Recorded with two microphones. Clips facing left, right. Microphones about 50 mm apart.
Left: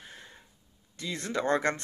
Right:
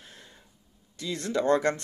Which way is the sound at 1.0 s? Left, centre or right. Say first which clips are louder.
Right 3 dB; left.